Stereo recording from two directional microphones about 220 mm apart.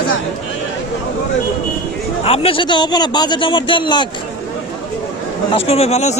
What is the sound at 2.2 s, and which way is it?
A man's voice, 25° left (ahead or behind).